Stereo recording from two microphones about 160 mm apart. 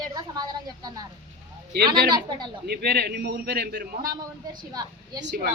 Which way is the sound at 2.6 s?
90° right.